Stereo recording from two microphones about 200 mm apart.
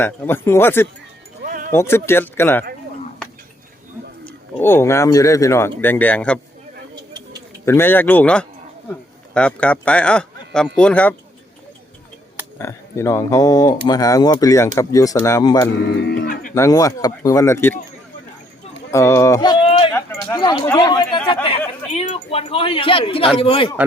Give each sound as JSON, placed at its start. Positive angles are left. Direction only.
{"t": 0.0, "sound": "speech", "side_deg": 10}
{"t": 1.5, "sound": "sheep", "side_deg": -45}
{"t": 1.7, "sound": "speech", "side_deg": 10}
{"t": 4.6, "sound": "speech", "side_deg": 10}
{"t": 7.6, "sound": "speech", "side_deg": 10}
{"t": 12.5, "sound": "speech", "side_deg": 15}
{"t": 15.7, "sound": "speech", "side_deg": 60}
{"t": 16.6, "sound": "speech", "side_deg": 15}
{"t": 18.9, "sound": "a sound", "side_deg": 15}
{"t": 19.9, "sound": "a sound", "side_deg": 15}
{"t": 20.7, "sound": "speech", "side_deg": 20}